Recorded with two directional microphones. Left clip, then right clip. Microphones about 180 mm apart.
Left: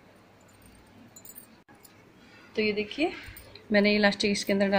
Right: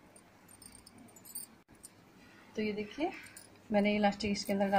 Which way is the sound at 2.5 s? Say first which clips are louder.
Left 9 dB; 20° left (ahead or behind).